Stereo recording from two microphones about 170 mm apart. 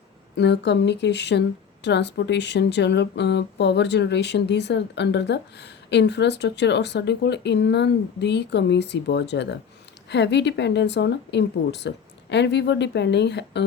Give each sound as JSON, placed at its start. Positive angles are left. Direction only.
{"t": 0.3, "sound": "a woman's voice", "side_deg": 90}